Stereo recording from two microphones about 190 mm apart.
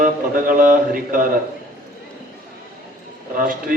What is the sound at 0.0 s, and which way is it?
A man's voice, 45° right (ahead or behind).